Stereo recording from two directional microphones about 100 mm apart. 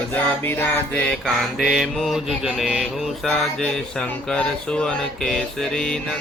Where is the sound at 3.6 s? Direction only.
10° left (ahead or behind).